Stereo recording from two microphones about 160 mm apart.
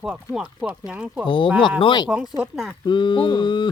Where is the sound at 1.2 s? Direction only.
30° left (ahead or behind).